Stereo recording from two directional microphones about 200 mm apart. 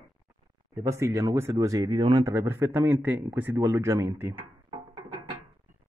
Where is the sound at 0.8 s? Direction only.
15° right (ahead or behind).